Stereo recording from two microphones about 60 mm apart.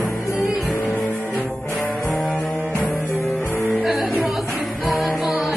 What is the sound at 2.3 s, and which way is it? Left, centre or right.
Music, left.